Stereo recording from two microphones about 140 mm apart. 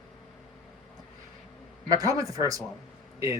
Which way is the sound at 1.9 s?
25° right (ahead or behind).